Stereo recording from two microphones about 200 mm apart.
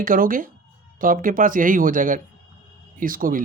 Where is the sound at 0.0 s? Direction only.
45° right (ahead or behind).